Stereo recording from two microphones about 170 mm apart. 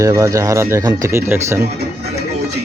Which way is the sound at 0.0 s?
20° right (ahead or behind).